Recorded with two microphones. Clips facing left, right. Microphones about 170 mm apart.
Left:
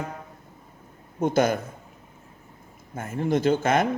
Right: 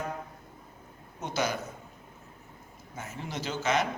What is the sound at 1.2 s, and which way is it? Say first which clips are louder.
Speech: left 10 dB; 50° left (ahead or behind).